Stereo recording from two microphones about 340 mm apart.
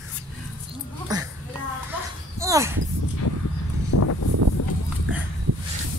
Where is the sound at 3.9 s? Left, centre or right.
Left.